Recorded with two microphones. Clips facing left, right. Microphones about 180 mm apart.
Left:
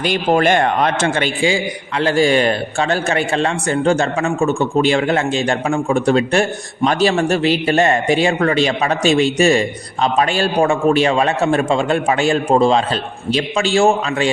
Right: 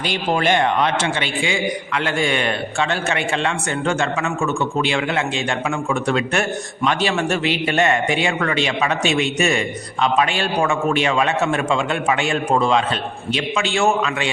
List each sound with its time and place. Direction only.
0.0 s a man's voice: 50° left (ahead or behind)